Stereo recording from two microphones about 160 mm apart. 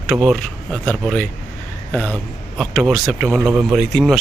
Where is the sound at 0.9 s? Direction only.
Centre (ahead or behind).